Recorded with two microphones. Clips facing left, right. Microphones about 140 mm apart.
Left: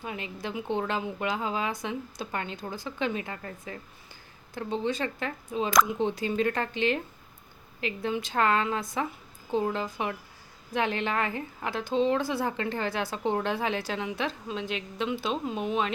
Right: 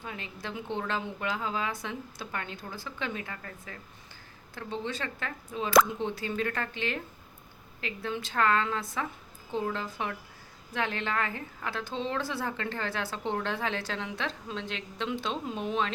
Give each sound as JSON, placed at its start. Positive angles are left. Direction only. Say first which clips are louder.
{"t": 0.0, "sound": "a woman's voice", "louder": "left 4 dB", "side_deg": 15}